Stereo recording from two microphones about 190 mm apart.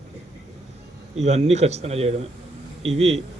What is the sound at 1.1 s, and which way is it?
A man's voice, 35° right (ahead or behind).